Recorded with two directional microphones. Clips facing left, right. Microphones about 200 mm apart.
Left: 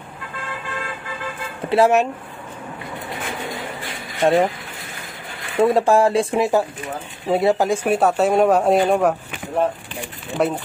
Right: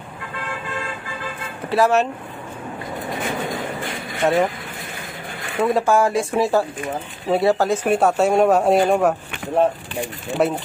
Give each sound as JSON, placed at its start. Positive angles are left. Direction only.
{"t": 1.7, "sound": "speech", "side_deg": 20}
{"t": 4.2, "sound": "speech", "side_deg": 30}
{"t": 5.6, "sound": "speech", "side_deg": 30}
{"t": 6.3, "sound": "speech", "side_deg": 15}
{"t": 10.4, "sound": "speech", "side_deg": -5}